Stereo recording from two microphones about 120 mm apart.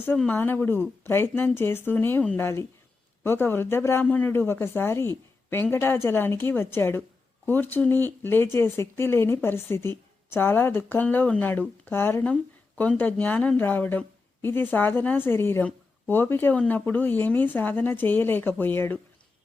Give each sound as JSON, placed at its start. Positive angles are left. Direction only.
{"t": 0.2, "sound": "speech", "side_deg": 15}